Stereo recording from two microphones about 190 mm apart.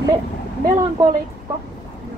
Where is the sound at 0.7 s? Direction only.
15° right (ahead or behind).